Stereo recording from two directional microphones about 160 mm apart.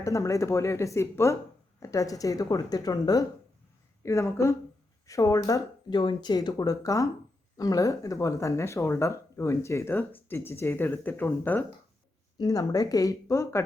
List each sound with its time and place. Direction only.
0.0 s speech: 20° left (ahead or behind)
12.4 s speech: 25° left (ahead or behind)